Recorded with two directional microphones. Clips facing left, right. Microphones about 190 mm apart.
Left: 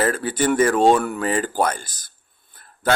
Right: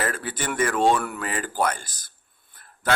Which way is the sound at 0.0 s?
30° left (ahead or behind).